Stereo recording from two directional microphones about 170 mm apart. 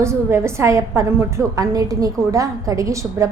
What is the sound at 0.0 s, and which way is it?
A woman's voice, 15° right (ahead or behind).